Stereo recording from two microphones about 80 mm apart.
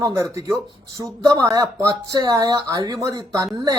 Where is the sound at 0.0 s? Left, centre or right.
Right.